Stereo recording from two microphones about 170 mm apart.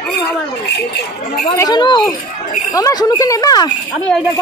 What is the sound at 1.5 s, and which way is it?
A woman's voice, 25° left (ahead or behind).